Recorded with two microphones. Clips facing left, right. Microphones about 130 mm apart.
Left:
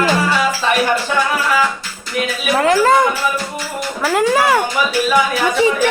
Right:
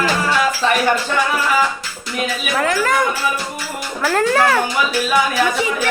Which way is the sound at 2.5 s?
30° left (ahead or behind).